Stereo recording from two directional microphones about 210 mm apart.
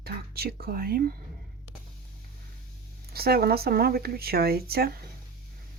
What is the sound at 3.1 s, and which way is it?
Speech, 45° right (ahead or behind).